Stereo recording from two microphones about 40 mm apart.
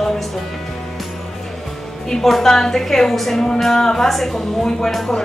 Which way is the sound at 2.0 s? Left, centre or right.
Centre.